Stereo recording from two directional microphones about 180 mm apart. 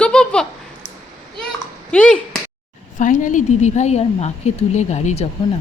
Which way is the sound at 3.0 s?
45° left (ahead or behind).